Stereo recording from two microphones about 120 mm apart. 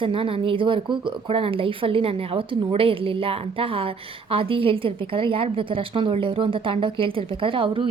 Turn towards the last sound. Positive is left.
turn(degrees=-45)  # may be behind; listen again after turning